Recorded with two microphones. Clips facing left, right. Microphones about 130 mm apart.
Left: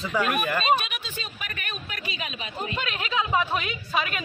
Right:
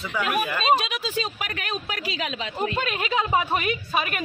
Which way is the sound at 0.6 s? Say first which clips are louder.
Right 2 dB; 90° right.